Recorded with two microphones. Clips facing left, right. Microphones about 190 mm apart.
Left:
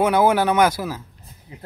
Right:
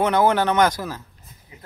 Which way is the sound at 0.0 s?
10° left (ahead or behind).